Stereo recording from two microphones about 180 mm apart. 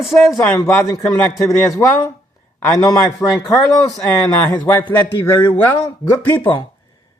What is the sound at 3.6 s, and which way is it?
Speech, 5° left (ahead or behind).